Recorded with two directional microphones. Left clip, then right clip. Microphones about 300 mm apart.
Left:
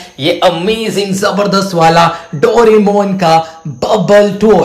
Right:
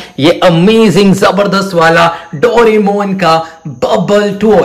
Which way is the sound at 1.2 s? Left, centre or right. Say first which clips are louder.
Right 3 dB; centre.